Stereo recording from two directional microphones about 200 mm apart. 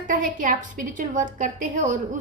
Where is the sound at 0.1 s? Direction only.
45° right (ahead or behind).